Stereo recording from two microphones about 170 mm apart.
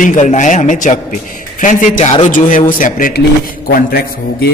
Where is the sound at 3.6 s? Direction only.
65° left (ahead or behind).